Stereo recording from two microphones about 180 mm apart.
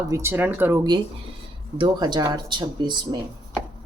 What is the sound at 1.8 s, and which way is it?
Speech, 25° right (ahead or behind).